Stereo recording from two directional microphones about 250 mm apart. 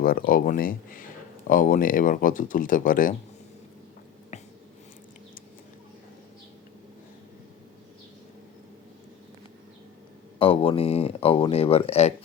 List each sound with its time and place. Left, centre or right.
0.0 s speech: left
10.3 s speech: left